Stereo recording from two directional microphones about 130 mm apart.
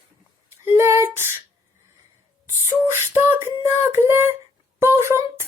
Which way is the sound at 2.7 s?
20° right (ahead or behind).